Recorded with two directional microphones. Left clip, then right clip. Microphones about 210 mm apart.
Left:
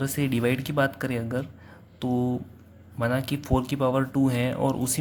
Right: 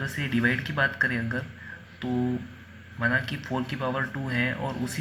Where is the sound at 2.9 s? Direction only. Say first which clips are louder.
Right 1 dB; 60° left (ahead or behind).